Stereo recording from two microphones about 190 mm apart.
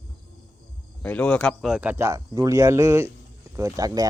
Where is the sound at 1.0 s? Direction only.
5° left (ahead or behind).